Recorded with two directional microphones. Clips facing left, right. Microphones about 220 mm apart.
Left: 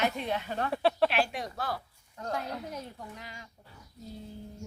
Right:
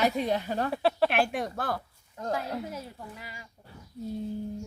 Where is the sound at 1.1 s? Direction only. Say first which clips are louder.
Right 3 dB; 55° right (ahead or behind).